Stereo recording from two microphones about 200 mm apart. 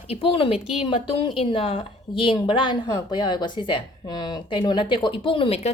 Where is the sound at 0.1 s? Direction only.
30° left (ahead or behind).